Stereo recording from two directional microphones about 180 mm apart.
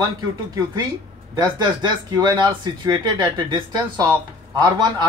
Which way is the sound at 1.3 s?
20° right (ahead or behind).